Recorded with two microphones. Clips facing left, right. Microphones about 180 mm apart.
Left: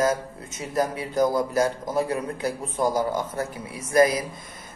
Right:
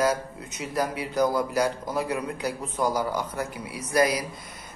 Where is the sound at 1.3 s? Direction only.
20° left (ahead or behind).